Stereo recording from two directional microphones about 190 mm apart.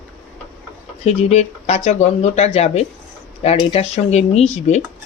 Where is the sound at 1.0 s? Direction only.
35° left (ahead or behind).